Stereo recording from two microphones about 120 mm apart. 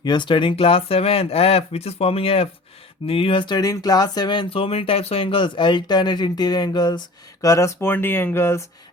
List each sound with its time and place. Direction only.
0.0 s speech: 40° left (ahead or behind)
7.4 s speech: 25° left (ahead or behind)